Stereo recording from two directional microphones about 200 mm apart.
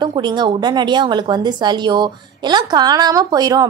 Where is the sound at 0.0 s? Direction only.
20° right (ahead or behind).